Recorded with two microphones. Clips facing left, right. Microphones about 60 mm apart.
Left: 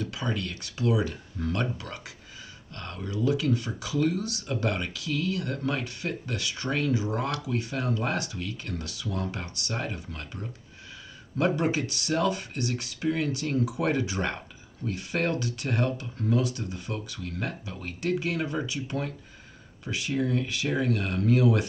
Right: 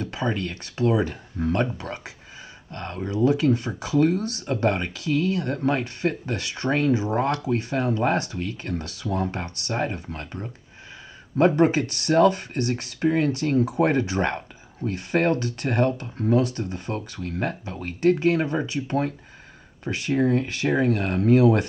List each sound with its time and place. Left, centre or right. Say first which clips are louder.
0.1 s speech: right 5 dB; right